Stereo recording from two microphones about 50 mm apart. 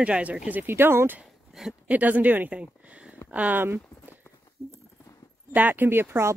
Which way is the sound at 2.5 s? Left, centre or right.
Right.